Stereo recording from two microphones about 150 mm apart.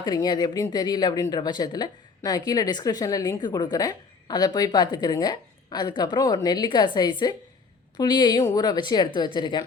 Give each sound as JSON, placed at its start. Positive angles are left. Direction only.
{"t": 0.0, "sound": "speech", "side_deg": 25}